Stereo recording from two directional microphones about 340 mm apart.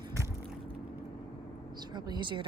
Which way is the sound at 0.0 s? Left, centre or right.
Centre.